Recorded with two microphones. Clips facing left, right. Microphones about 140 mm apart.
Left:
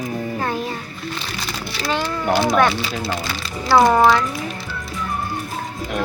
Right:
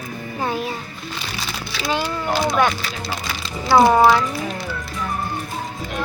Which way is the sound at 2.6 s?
Centre (ahead or behind).